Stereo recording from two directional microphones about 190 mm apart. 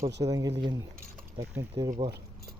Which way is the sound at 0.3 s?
20° right (ahead or behind).